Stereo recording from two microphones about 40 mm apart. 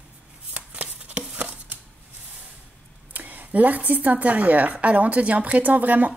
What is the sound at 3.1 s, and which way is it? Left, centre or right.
A woman's voice, right.